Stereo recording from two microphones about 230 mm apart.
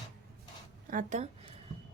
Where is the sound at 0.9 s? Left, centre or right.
Right.